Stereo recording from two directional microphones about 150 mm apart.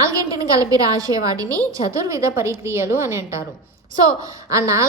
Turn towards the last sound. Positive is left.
turn(degrees=-20)  # may be behind; listen again after turning